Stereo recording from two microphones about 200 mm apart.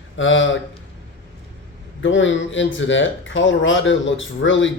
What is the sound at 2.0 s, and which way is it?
Speech, 70° left (ahead or behind).